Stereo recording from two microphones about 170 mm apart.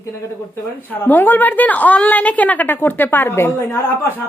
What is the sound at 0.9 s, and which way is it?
A woman's voice, 10° left (ahead or behind).